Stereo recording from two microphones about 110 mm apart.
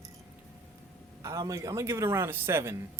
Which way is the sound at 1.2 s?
30° right (ahead or behind).